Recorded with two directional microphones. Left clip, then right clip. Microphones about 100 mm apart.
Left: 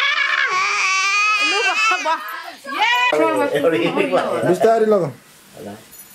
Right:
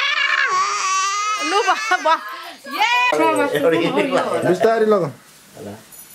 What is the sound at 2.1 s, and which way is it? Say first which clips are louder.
Speech: right 4 dB; 40° right (ahead or behind).